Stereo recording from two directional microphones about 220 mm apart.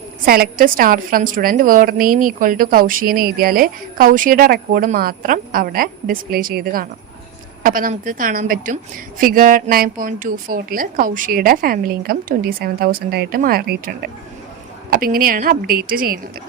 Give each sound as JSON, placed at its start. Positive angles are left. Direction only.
{"t": 0.3, "sound": "a woman's voice", "side_deg": -45}